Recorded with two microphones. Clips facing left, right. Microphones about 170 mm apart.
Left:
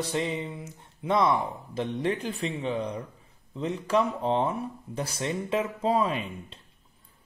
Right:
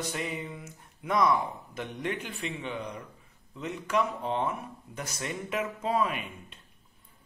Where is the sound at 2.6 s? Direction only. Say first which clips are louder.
Left 6 dB; 30° left (ahead or behind).